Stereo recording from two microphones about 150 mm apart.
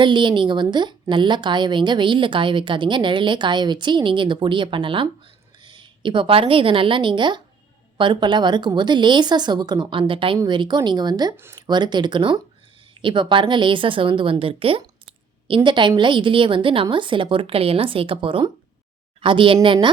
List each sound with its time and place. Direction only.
0.0 s a woman's voice: 30° right (ahead or behind)